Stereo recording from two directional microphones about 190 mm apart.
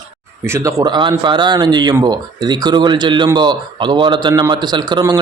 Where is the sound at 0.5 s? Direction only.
15° right (ahead or behind).